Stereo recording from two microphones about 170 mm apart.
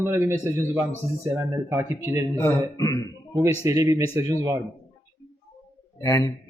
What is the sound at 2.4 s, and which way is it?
Speech, 15° left (ahead or behind).